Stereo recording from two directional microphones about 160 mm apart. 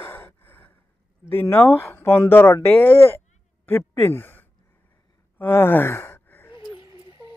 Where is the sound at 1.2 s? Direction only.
15° left (ahead or behind).